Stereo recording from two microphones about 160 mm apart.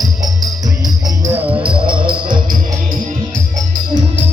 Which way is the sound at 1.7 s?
30° right (ahead or behind).